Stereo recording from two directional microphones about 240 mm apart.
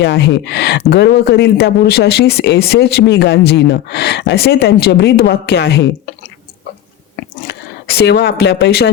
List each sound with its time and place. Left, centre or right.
0.0 s speech: left
7.4 s speech: left